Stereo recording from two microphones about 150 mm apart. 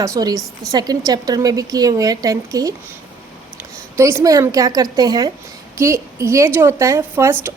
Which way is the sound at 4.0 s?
20° right (ahead or behind).